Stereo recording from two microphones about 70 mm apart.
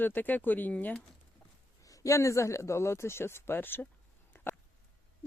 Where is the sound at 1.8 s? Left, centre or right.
Left.